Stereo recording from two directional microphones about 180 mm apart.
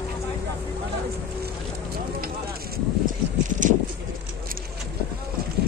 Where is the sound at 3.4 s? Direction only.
45° right (ahead or behind).